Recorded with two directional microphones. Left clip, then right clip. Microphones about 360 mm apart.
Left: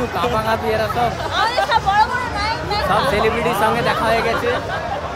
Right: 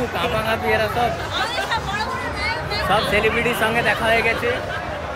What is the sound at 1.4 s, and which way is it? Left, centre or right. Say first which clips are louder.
Hubbub: left 7 dB; centre.